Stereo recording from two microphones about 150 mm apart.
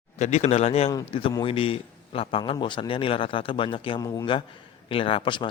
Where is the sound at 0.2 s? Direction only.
45° left (ahead or behind).